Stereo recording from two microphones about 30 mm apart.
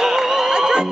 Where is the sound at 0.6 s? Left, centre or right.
Right.